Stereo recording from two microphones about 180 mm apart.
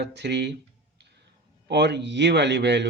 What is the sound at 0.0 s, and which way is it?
A man's voice, 70° right (ahead or behind).